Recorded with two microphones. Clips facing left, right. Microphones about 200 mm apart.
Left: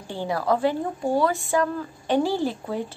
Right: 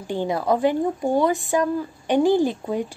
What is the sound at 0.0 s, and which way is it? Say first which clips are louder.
A woman's voice: right 3 dB; 20° right (ahead or behind).